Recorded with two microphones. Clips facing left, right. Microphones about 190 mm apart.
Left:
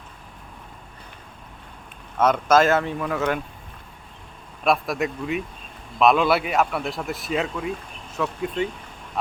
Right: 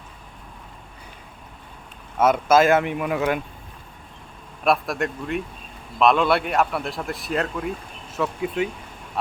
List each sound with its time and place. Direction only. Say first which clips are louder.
2.1 s speech: right 1 dB; 10° right (ahead or behind)
4.6 s speech: even; centre (ahead or behind)